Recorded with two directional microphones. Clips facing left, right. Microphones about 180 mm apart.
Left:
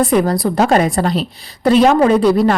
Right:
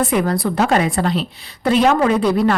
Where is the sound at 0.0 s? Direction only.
35° left (ahead or behind).